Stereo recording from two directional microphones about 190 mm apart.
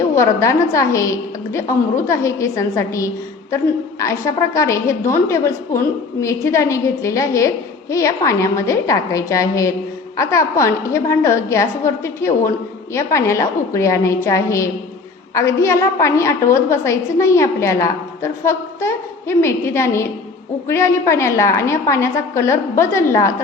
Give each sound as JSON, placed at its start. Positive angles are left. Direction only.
{"t": 0.2, "sound": "a woman's voice", "side_deg": 15}